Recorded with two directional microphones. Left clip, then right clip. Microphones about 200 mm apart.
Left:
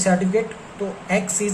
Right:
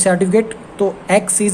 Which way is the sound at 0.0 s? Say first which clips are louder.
Right 6 dB; 55° right (ahead or behind).